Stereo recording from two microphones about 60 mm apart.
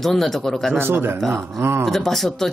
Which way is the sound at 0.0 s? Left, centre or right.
Centre.